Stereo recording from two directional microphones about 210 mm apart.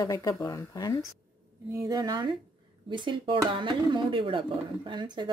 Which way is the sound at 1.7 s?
15° right (ahead or behind).